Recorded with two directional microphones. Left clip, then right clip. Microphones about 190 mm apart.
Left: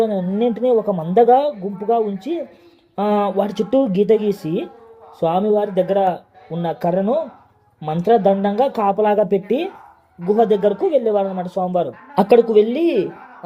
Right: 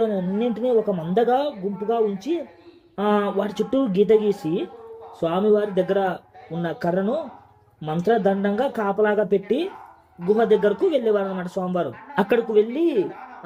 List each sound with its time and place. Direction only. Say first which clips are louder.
0.0 s speech: left 5 dB; 20° left (ahead or behind)